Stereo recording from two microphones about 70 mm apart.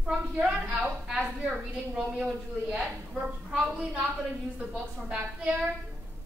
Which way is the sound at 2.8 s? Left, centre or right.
Centre.